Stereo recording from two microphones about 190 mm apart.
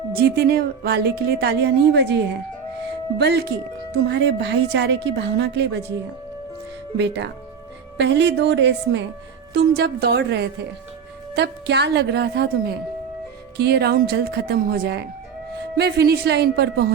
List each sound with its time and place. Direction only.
0.2 s a woman's voice: 55° right (ahead or behind)
2.8 s music: 60° right (ahead or behind)
4.0 s a woman's voice: 60° right (ahead or behind)
6.9 s a woman's voice: 70° right (ahead or behind)